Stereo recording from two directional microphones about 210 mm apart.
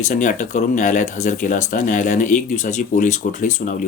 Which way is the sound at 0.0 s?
35° left (ahead or behind).